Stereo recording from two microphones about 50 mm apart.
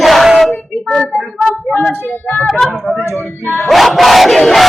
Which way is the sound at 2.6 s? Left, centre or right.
Centre.